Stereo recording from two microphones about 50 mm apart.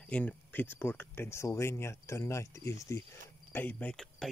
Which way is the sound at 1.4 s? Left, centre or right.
Left.